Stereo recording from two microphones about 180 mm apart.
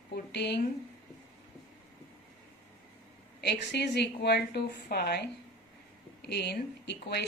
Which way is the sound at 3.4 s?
70° left (ahead or behind).